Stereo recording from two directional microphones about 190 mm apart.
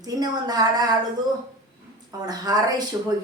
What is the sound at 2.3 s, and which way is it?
Speech, 20° right (ahead or behind).